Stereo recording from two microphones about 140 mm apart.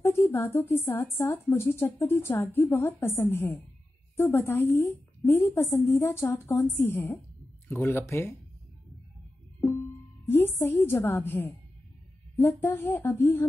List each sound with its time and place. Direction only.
0.0 s a woman's voice: 15° left (ahead or behind)
10.2 s a woman's voice: 15° left (ahead or behind)